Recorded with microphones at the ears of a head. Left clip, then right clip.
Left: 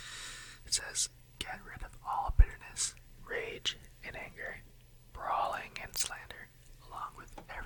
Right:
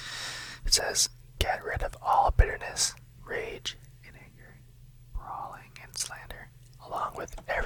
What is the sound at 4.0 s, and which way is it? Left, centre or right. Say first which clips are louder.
Whispering: left 10 dB; left.